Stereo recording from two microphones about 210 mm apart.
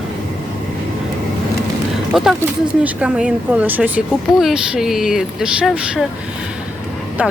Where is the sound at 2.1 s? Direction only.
Centre (ahead or behind).